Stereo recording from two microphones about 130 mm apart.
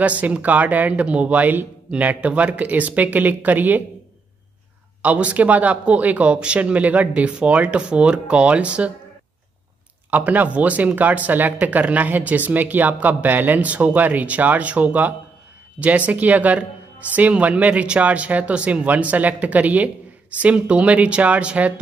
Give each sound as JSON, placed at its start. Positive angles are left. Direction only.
{"t": 0.0, "sound": "speech", "side_deg": -10}
{"t": 5.0, "sound": "speech", "side_deg": -10}
{"t": 10.1, "sound": "speech", "side_deg": -10}